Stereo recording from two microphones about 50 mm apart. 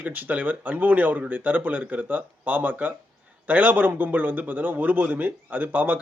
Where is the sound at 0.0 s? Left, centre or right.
Right.